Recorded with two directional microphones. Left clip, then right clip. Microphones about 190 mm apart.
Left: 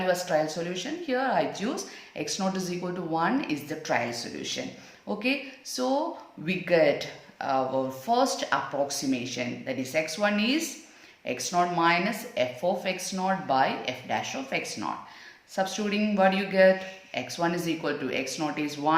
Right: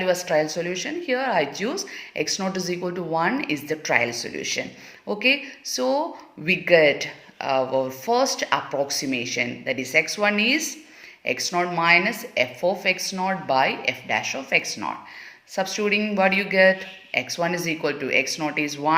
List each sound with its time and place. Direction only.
0.0 s speech: 30° right (ahead or behind)